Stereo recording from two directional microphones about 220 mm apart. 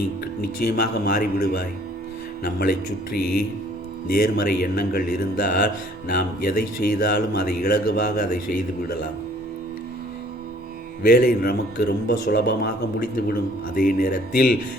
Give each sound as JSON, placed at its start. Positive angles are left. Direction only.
{"t": 0.4, "sound": "a man's voice", "side_deg": 45}
{"t": 11.0, "sound": "a man's voice", "side_deg": 45}